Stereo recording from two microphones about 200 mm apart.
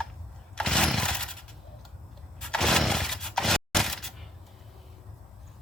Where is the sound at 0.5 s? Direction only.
5° left (ahead or behind).